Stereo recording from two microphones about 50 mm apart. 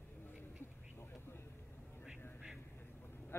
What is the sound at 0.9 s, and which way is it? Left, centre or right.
Vehicle, left.